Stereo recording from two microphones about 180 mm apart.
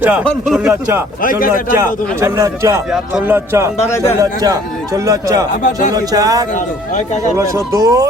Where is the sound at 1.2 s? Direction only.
50° left (ahead or behind).